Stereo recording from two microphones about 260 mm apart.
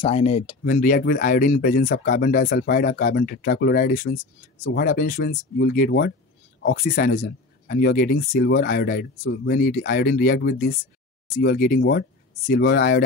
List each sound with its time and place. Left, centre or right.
0.0 s speech: left